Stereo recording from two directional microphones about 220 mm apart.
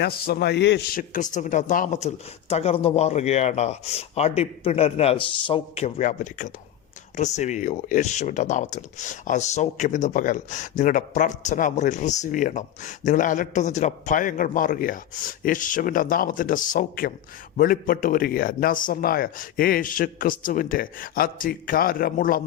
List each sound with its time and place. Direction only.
0.0 s speech: 45° left (ahead or behind)